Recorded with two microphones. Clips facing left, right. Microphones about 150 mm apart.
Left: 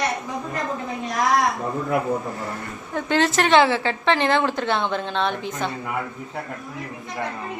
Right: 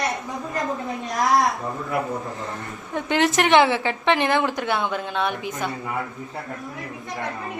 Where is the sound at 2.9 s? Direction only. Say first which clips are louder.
Even; 20° right (ahead or behind).